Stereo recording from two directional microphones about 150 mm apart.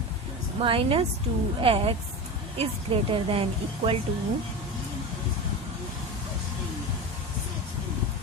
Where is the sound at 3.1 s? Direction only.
40° right (ahead or behind).